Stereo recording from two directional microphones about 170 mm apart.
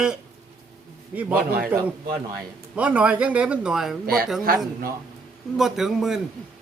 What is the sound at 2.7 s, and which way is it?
A man's voice, 5° right (ahead or behind).